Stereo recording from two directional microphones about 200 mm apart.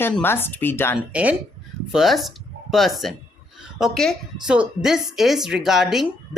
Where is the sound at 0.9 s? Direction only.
5° right (ahead or behind).